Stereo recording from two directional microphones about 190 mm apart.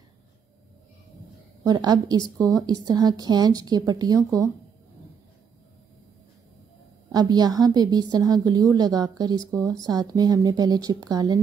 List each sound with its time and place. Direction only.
1.6 s a woman's voice: 20° right (ahead or behind)
7.1 s a woman's voice: 20° right (ahead or behind)